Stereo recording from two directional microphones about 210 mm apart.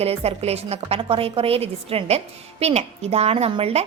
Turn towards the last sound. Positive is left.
turn(degrees=-30)  # may be behind; listen again after turning